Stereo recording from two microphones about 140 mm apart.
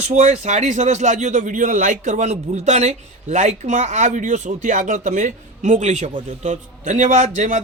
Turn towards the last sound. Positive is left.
turn(degrees=-65)  # may be behind; listen again after turning